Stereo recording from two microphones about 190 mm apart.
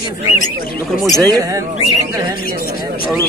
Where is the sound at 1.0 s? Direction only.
Centre (ahead or behind).